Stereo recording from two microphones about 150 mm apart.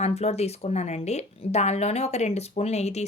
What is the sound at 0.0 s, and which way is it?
A woman's voice, 45° left (ahead or behind).